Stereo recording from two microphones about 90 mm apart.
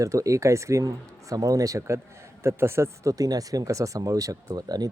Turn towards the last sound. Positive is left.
turn(degrees=-45)  # may be behind; listen again after turning